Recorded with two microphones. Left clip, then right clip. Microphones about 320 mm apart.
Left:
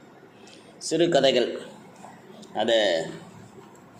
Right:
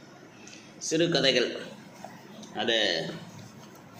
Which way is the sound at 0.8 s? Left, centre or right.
Centre.